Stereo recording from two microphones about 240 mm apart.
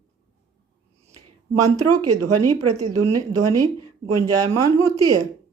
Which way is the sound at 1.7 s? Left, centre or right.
Right.